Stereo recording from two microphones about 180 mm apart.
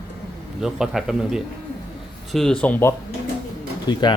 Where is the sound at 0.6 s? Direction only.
5° right (ahead or behind).